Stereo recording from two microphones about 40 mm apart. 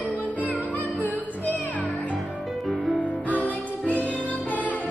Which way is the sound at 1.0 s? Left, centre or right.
Left.